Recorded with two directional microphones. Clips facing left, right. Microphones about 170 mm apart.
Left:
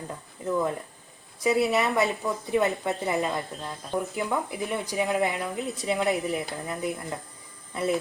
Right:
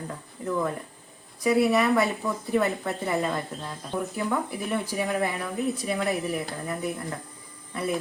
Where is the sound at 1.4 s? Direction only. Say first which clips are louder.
Right 2 dB; 20° left (ahead or behind).